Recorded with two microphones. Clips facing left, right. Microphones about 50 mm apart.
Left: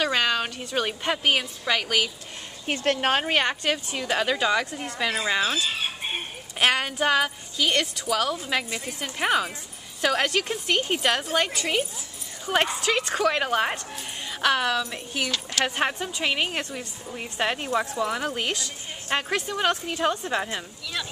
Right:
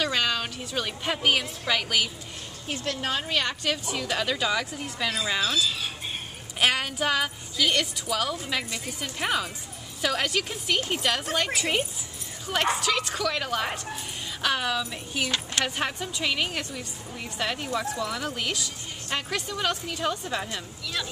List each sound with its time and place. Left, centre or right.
0.0 s a sound: centre
1.0 s speech: centre
2.6 s speech: left
3.3 s a woman's voice: left
3.9 s speech: centre
5.4 s chicken: left
6.6 s speech: centre
8.5 s speech: centre
11.5 s speech: centre
12.5 s a woman's voice: centre
14.4 s speech: centre
15.6 s a woman's voice: centre